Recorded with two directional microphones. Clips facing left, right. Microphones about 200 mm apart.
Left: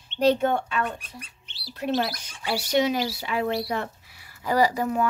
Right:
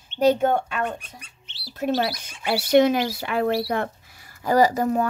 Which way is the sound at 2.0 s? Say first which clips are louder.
Right 4 dB; 55° right (ahead or behind).